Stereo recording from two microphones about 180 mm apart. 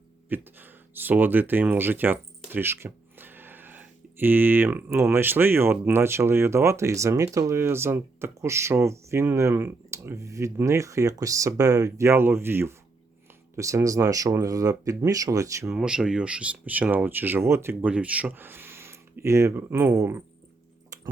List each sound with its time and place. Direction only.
0.3 s speech: 10° right (ahead or behind)
15.7 s speech: 5° right (ahead or behind)
20.9 s typing: 20° right (ahead or behind)